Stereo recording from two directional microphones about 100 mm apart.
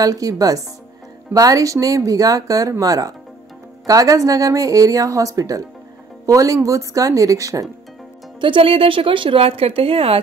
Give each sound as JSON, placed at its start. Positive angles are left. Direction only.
{"t": 0.0, "sound": "speech", "side_deg": -35}
{"t": 8.4, "sound": "a woman's voice", "side_deg": -55}